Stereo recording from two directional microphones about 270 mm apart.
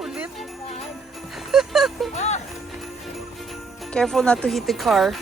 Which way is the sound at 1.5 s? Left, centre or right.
Centre.